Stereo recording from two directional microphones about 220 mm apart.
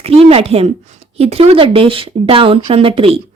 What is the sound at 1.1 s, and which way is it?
A woman's voice, 30° right (ahead or behind).